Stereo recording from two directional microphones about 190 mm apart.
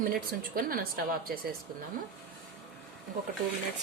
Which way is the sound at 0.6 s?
50° right (ahead or behind).